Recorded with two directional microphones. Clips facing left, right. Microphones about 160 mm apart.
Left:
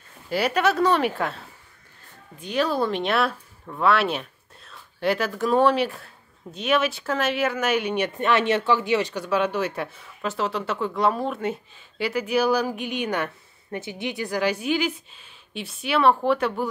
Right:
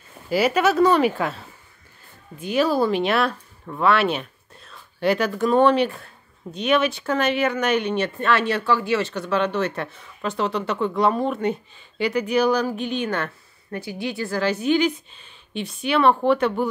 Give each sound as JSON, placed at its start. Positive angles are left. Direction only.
{"t": 0.3, "sound": "speech", "side_deg": -5}
{"t": 2.4, "sound": "speech", "side_deg": -5}